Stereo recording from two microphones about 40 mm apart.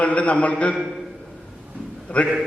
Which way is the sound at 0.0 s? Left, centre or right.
Left.